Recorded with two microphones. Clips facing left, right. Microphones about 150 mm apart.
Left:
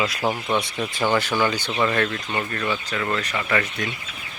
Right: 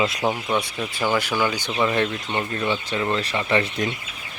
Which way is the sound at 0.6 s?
10° right (ahead or behind).